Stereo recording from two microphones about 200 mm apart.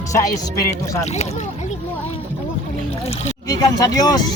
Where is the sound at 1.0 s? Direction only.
35° left (ahead or behind).